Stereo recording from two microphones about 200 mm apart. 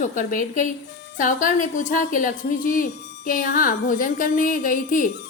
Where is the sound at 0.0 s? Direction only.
40° left (ahead or behind).